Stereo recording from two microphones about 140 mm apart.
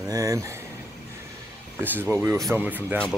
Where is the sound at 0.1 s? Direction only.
25° right (ahead or behind).